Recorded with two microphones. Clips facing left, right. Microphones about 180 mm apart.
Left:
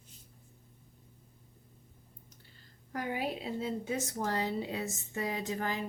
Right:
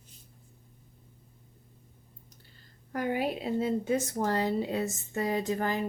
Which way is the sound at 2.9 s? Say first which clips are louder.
Right 5 dB; 55° right (ahead or behind).